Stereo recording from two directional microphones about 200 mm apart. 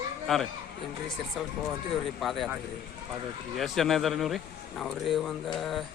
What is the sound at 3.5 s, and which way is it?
Speech, centre (ahead or behind).